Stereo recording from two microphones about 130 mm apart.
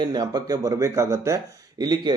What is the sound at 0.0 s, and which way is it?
Speech, 35° right (ahead or behind).